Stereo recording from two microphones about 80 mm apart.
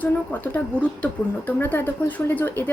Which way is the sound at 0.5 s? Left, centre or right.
Centre.